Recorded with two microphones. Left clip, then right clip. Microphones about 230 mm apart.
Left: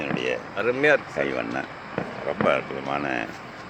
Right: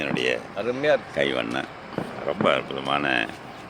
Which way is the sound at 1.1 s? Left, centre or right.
Centre.